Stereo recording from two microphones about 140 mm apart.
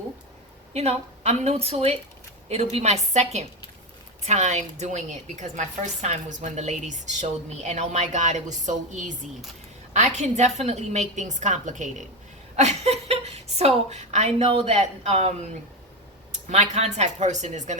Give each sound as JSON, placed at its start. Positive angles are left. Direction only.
{"t": 0.7, "sound": "a woman's voice", "side_deg": -50}
{"t": 12.5, "sound": "a woman's voice", "side_deg": -50}
{"t": 16.5, "sound": "a woman's voice", "side_deg": -50}